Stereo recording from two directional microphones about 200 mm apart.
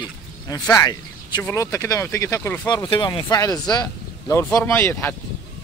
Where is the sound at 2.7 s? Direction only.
20° left (ahead or behind).